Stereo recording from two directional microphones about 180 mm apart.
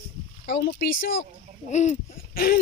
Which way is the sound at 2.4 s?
55° left (ahead or behind).